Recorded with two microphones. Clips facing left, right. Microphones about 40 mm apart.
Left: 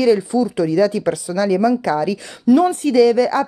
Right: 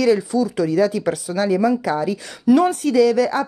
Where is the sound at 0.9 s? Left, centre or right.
Left.